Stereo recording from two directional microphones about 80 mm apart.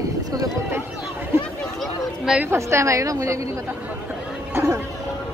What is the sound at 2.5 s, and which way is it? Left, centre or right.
A woman's voice, right.